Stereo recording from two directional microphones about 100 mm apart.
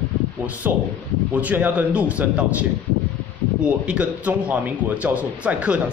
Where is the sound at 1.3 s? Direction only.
15° right (ahead or behind).